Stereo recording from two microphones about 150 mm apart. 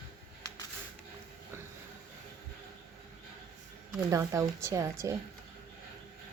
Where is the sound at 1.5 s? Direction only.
20° right (ahead or behind).